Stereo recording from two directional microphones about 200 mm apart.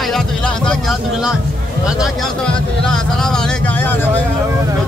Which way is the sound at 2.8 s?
5° left (ahead or behind).